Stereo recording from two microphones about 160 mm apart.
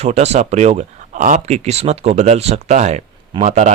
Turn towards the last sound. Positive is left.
turn(degrees=-45)  # may be behind; listen again after turning